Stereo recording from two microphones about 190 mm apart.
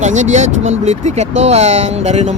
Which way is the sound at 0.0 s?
40° right (ahead or behind).